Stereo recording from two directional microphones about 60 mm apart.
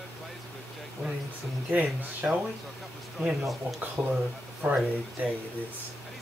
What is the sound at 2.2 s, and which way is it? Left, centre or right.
Speech, centre.